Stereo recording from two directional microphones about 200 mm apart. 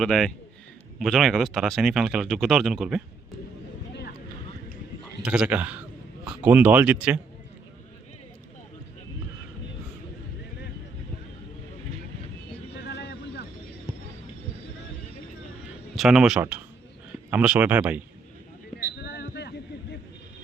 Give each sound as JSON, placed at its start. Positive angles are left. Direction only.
{"t": 0.0, "sound": "speech", "side_deg": 5}
{"t": 5.2, "sound": "speech", "side_deg": -5}
{"t": 12.7, "sound": "vehicle", "side_deg": 55}
{"t": 13.9, "sound": "a sound", "side_deg": -10}
{"t": 16.0, "sound": "speech", "side_deg": 0}
{"t": 18.8, "sound": "a sound", "side_deg": 55}